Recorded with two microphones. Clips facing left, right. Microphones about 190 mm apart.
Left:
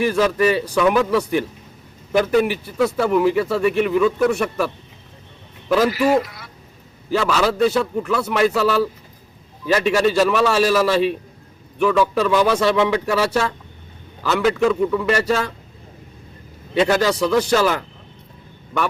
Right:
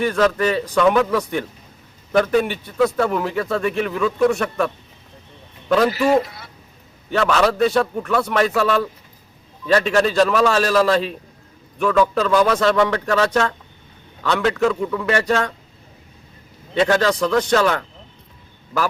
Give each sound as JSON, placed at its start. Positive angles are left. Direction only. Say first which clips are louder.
{"t": 0.0, "sound": "a man's voice", "louder": "left 1 dB", "side_deg": 5}
{"t": 6.2, "sound": "a sound", "louder": "right 1 dB", "side_deg": -25}
{"t": 7.1, "sound": "a man's voice", "louder": "right 1 dB", "side_deg": 5}
{"t": 16.7, "sound": "speech", "louder": "even", "side_deg": 5}